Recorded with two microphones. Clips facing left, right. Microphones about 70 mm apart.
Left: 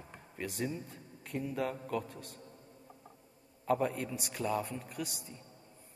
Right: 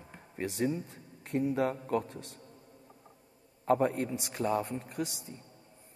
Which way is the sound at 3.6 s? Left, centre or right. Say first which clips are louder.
Right 4 dB; right.